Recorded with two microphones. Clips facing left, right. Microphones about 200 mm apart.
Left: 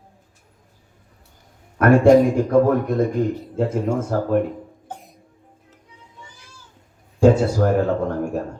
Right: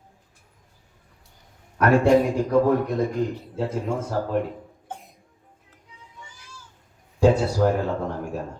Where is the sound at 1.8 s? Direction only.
50° left (ahead or behind).